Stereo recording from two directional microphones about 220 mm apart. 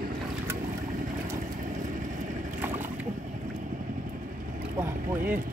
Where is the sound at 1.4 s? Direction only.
35° right (ahead or behind).